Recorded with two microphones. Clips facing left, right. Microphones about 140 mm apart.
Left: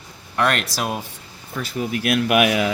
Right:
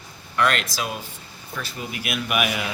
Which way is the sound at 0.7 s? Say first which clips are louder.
Left 4 dB; 65° left (ahead or behind).